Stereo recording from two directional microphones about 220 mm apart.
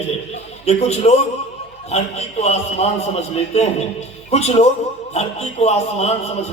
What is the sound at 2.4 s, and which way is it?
Speech, 30° left (ahead or behind).